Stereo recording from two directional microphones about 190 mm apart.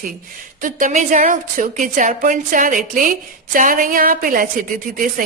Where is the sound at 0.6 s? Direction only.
45° right (ahead or behind).